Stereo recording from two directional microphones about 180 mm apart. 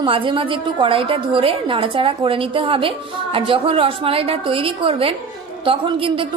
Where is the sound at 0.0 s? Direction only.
30° right (ahead or behind).